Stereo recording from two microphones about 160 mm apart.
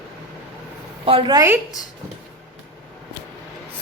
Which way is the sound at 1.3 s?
15° right (ahead or behind).